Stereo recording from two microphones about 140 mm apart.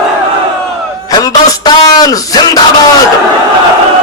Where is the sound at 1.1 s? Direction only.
25° left (ahead or behind).